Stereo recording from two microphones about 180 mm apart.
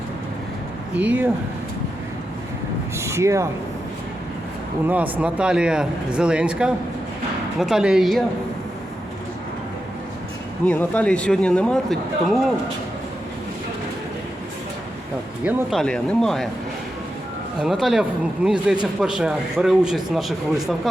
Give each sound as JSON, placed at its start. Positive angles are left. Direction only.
{"t": 0.9, "sound": "speech", "side_deg": -10}
{"t": 3.0, "sound": "speech", "side_deg": -15}
{"t": 4.9, "sound": "speech", "side_deg": -10}
{"t": 10.7, "sound": "speech", "side_deg": 5}
{"t": 15.4, "sound": "speech", "side_deg": 0}
{"t": 17.6, "sound": "speech", "side_deg": 0}